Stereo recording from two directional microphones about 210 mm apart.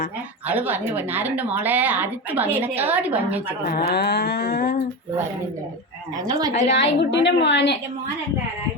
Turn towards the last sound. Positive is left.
turn(degrees=55)  # may be behind; listen again after turning